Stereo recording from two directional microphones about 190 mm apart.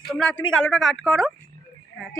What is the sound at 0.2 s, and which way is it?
Frog, 5° left (ahead or behind).